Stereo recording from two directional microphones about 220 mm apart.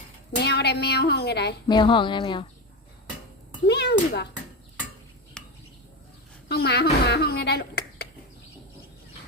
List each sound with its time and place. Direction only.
0.3 s a woman's voice: 50° left (ahead or behind)
1.6 s speech: 20° left (ahead or behind)
3.7 s a child's voice: 50° left (ahead or behind)
6.5 s a woman's voice: 45° left (ahead or behind)